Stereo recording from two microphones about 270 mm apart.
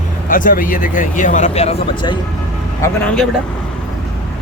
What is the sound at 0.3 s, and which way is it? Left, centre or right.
Speech, left.